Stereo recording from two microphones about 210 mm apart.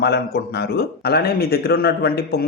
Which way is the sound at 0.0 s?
50° left (ahead or behind).